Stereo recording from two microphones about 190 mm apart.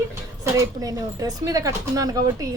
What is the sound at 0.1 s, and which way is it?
A woman's voice, 15° right (ahead or behind).